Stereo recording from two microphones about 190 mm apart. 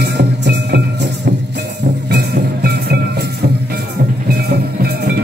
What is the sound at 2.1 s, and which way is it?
Music, 60° right (ahead or behind).